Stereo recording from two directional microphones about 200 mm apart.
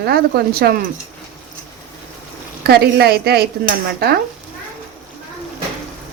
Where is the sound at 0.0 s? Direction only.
50° right (ahead or behind).